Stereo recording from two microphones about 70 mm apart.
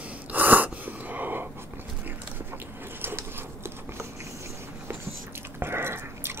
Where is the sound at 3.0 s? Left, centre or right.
Right.